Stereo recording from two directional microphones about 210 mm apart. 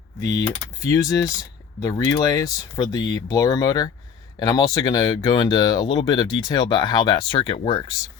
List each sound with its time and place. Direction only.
0.9 s speech: 15° left (ahead or behind)